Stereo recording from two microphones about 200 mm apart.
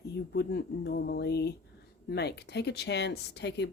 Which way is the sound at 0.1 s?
55° left (ahead or behind).